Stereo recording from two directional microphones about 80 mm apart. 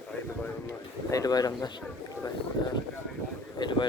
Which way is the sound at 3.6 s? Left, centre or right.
Left.